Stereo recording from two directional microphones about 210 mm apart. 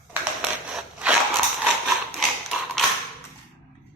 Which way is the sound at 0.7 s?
5° right (ahead or behind).